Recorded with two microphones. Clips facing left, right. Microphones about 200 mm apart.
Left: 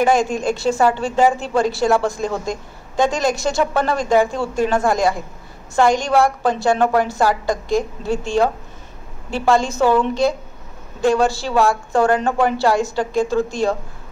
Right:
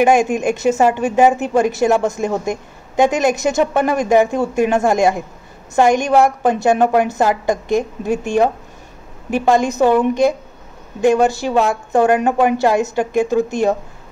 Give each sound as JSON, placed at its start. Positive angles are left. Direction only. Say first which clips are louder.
{"t": 0.0, "sound": "a woman's voice", "louder": "right 3 dB", "side_deg": -20}
{"t": 9.3, "sound": "a woman's voice", "louder": "right 3 dB", "side_deg": -20}